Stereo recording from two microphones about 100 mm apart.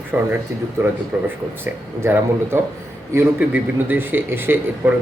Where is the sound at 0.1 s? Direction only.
20° right (ahead or behind).